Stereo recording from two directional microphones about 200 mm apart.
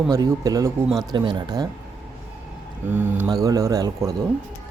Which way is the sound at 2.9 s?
10° right (ahead or behind).